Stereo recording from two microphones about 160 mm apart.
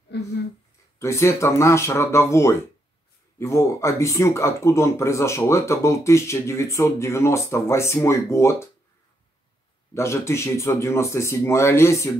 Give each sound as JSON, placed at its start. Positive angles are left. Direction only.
{"t": 0.1, "sound": "a sound", "side_deg": 90}
{"t": 0.9, "sound": "speech", "side_deg": 15}
{"t": 9.9, "sound": "speech", "side_deg": 15}